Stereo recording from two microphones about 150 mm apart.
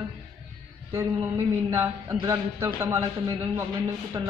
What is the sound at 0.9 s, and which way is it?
A woman's voice, 20° right (ahead or behind).